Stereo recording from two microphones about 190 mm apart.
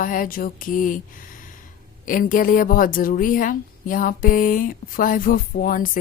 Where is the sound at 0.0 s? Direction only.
45° left (ahead or behind).